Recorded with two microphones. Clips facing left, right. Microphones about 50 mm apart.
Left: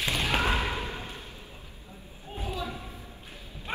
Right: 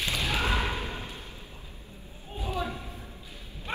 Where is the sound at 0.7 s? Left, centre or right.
Left.